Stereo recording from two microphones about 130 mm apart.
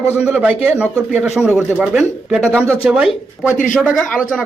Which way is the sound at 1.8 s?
Centre (ahead or behind).